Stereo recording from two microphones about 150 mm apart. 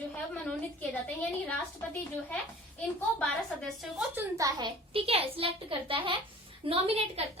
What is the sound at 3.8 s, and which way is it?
Speech, 5° right (ahead or behind).